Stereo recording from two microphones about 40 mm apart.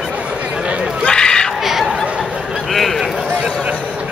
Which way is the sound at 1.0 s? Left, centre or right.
Left.